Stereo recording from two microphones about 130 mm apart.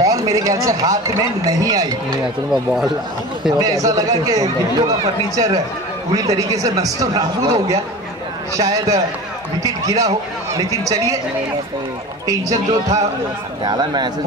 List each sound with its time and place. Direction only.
0.0 s speech: 25° right (ahead or behind)
2.5 s speech: centre (ahead or behind)
3.5 s speech: 30° right (ahead or behind)
12.3 s a man's voice: 25° right (ahead or behind)